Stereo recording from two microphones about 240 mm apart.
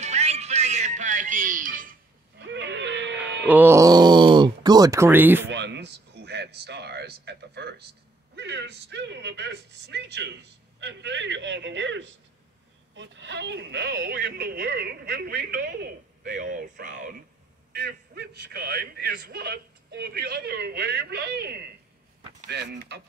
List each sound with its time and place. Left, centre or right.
0.0 s music: right
2.4 s a sound: right
3.4 s speech: centre
5.5 s speech: right
17.7 s speech: right